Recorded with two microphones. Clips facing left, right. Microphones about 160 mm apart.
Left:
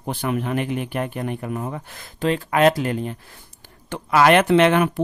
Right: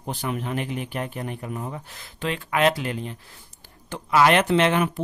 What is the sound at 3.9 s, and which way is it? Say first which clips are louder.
Speech: left 3 dB; 60° left (ahead or behind).